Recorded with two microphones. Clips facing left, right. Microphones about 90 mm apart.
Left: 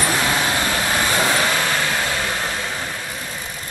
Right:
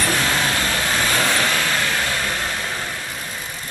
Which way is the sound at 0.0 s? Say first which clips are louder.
Left 1 dB; 20° left (ahead or behind).